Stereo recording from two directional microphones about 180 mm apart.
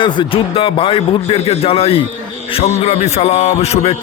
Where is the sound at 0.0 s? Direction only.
25° left (ahead or behind).